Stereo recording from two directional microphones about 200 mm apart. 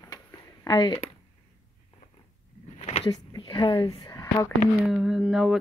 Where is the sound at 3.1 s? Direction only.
20° left (ahead or behind).